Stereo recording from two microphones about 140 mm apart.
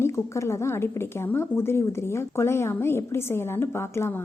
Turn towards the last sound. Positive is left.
turn(degrees=20)  # may be behind; listen again after turning